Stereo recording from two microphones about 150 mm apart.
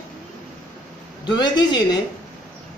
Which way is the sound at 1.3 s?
30° left (ahead or behind).